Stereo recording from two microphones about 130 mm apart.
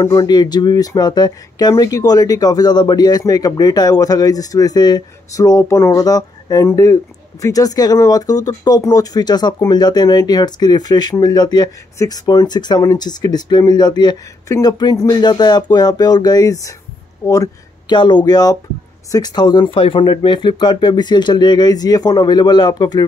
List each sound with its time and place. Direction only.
0.0 s speech: 25° left (ahead or behind)
17.2 s a sound: 25° left (ahead or behind)
17.9 s speech: 35° left (ahead or behind)